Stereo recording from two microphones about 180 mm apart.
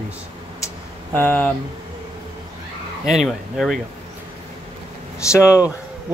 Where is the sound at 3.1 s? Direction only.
Centre (ahead or behind).